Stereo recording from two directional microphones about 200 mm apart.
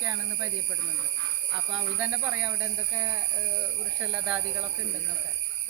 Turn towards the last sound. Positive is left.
turn(degrees=-5)  # may be behind; listen again after turning